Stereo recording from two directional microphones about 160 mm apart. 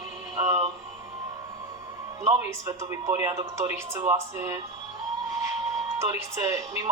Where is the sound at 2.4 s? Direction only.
15° right (ahead or behind).